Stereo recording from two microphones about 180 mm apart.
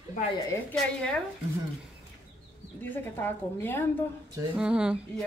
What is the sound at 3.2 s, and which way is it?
Speech, 10° left (ahead or behind).